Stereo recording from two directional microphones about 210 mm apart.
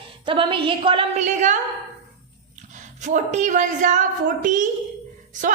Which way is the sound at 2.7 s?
35° right (ahead or behind).